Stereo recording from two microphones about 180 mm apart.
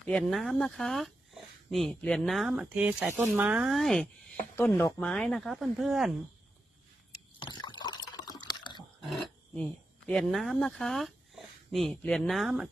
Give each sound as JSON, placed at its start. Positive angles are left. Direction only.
{"t": 0.0, "sound": "speech", "side_deg": 5}
{"t": 4.5, "sound": "speech", "side_deg": 15}
{"t": 7.3, "sound": "liquid", "side_deg": 25}
{"t": 9.0, "sound": "pig", "side_deg": 0}
{"t": 10.1, "sound": "speech", "side_deg": 0}